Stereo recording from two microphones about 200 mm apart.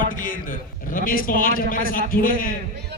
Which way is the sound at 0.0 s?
45° left (ahead or behind).